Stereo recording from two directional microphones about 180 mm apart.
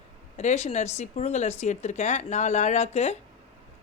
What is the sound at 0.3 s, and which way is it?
Speech, 40° left (ahead or behind).